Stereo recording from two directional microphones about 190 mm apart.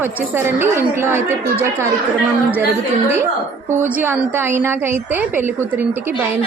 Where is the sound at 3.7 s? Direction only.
10° right (ahead or behind).